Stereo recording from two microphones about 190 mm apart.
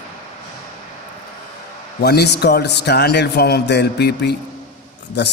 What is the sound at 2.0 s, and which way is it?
A man's voice, 60° left (ahead or behind).